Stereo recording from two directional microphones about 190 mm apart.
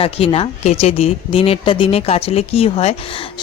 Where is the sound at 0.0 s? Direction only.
30° left (ahead or behind).